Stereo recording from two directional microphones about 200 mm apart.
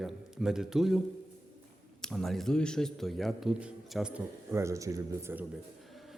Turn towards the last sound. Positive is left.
turn(degrees=-10)  # may be behind; listen again after turning